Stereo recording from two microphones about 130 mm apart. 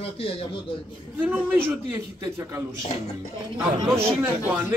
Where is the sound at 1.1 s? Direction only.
10° right (ahead or behind).